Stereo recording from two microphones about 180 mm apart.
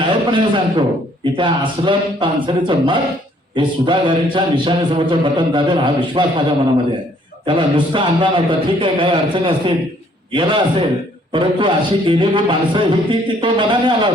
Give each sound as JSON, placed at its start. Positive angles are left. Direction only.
{"t": 0.0, "sound": "a man's voice", "side_deg": -25}
{"t": 7.4, "sound": "a man's voice", "side_deg": -25}